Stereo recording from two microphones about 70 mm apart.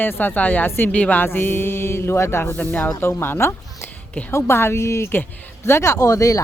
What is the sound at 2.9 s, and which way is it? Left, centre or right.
A woman's voice, left.